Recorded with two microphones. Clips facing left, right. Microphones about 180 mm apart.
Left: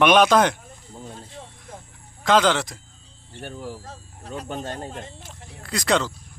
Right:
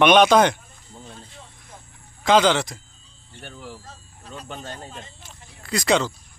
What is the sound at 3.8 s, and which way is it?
Speech, 70° left (ahead or behind).